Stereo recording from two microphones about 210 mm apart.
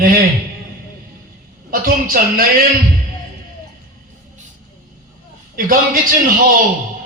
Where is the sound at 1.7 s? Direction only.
45° right (ahead or behind).